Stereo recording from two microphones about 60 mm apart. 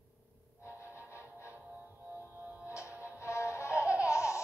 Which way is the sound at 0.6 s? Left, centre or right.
Left.